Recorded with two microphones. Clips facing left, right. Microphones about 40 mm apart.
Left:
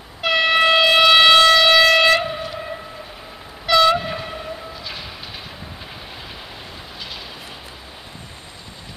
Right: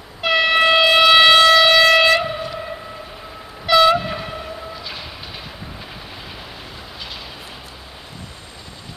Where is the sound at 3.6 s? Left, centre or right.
Centre.